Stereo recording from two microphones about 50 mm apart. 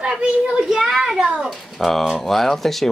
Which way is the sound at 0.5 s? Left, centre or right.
Centre.